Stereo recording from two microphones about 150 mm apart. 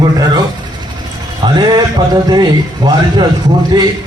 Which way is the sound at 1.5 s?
30° right (ahead or behind).